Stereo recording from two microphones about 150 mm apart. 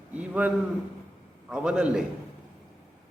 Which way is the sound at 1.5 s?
5° right (ahead or behind).